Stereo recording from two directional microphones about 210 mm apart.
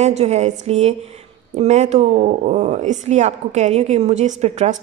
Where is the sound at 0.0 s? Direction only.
30° right (ahead or behind).